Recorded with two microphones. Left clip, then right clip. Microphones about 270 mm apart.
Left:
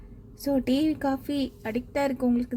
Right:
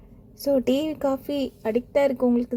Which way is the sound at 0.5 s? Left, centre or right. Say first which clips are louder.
Right 3 dB; centre.